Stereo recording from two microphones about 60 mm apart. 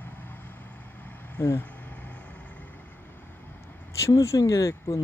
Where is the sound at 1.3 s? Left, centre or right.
Left.